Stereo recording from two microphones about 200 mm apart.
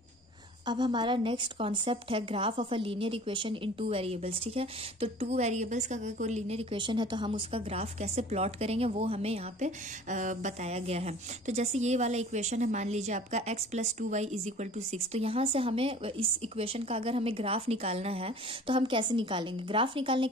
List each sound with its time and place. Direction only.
0.7 s a woman's voice: 20° right (ahead or behind)